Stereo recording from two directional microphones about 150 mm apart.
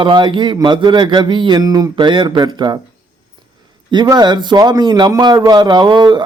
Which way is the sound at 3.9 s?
30° right (ahead or behind).